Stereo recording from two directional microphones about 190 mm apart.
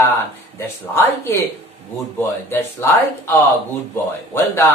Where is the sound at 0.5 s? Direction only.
15° left (ahead or behind).